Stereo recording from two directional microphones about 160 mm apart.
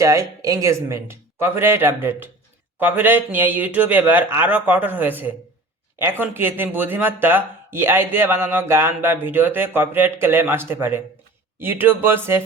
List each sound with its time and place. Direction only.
0.0 s a man's voice: 20° right (ahead or behind)